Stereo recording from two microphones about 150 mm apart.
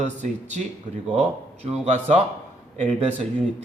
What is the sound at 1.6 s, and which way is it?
Speech, 50° right (ahead or behind).